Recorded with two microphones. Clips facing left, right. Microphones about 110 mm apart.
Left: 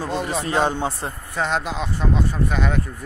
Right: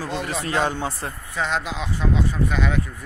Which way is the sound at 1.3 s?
45° left (ahead or behind).